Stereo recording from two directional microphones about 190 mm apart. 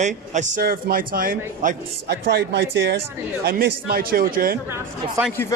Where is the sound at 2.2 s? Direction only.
60° right (ahead or behind).